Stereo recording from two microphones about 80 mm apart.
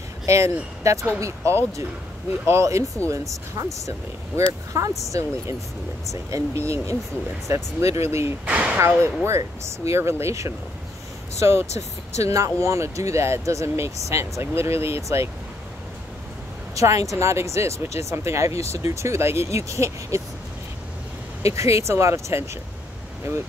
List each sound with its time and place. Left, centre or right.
0.3 s speech: right
4.7 s speech: right
6.3 s speech: right
8.5 s speech: centre
8.7 s speech: right
16.7 s speech: right
21.4 s speech: right